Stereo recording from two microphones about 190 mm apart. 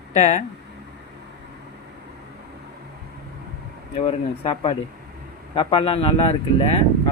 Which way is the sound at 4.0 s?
30° left (ahead or behind).